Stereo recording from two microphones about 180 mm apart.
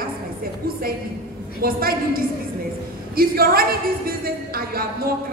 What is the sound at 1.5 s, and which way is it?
A woman's voice, 55° right (ahead or behind).